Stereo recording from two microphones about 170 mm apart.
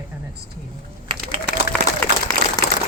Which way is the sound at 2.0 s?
10° left (ahead or behind).